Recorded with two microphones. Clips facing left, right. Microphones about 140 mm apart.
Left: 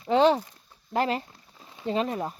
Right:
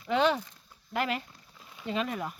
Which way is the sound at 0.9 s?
30° left (ahead or behind).